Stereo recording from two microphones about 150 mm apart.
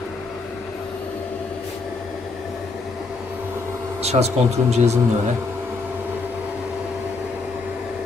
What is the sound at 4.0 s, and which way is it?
Speech, 45° right (ahead or behind).